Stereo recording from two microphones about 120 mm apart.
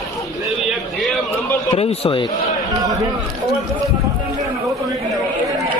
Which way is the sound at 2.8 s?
30° right (ahead or behind).